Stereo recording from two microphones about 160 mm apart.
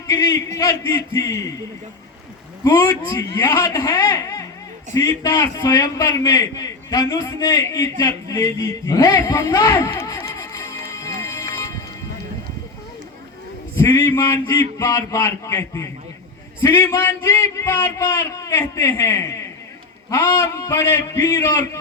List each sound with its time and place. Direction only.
0.1 s a man's voice: 20° left (ahead or behind)
2.6 s a man's voice: 15° left (ahead or behind)
13.7 s a man's voice: 15° left (ahead or behind)